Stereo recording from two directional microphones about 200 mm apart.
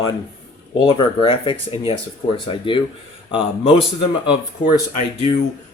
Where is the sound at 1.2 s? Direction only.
25° left (ahead or behind).